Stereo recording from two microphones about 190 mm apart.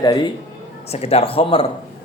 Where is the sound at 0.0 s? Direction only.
20° left (ahead or behind).